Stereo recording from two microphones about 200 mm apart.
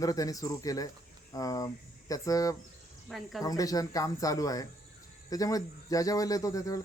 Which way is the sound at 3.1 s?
Centre (ahead or behind).